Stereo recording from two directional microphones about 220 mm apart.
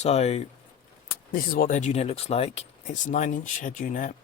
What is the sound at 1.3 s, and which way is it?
Speech, 40° left (ahead or behind).